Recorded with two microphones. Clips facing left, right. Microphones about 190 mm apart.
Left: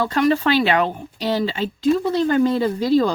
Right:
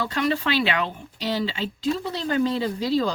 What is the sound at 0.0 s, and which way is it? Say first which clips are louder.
Speech: left 6 dB; 45° left (ahead or behind).